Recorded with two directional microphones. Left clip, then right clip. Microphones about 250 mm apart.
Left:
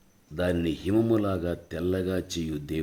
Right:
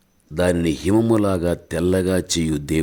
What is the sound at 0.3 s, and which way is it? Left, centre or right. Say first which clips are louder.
A man's voice: right 8 dB; right.